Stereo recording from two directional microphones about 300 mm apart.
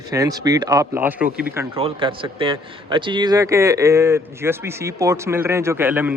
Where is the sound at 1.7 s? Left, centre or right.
Centre.